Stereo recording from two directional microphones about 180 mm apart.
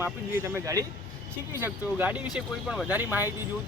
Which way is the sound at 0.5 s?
20° right (ahead or behind).